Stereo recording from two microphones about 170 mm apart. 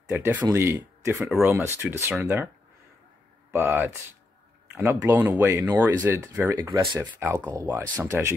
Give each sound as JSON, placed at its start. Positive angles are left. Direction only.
{"t": 0.1, "sound": "speech", "side_deg": -10}
{"t": 3.5, "sound": "speech", "side_deg": -10}
{"t": 4.9, "sound": "speech", "side_deg": -15}